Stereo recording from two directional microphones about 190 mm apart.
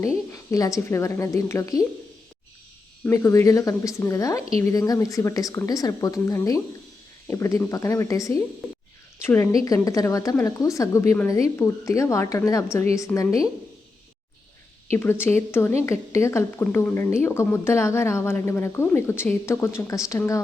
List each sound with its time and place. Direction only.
0.3 s a woman's voice: 15° left (ahead or behind)
3.0 s a woman's voice: 15° left (ahead or behind)
14.9 s a woman's voice: 10° left (ahead or behind)